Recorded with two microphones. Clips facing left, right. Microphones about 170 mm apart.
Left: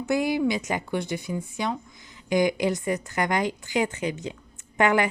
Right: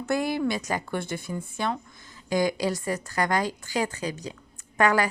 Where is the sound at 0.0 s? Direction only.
15° left (ahead or behind).